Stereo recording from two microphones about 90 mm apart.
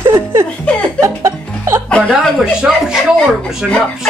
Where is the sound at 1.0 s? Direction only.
30° right (ahead or behind).